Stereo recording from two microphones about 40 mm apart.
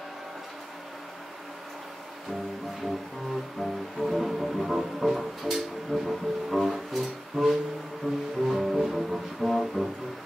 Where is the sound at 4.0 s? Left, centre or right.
Centre.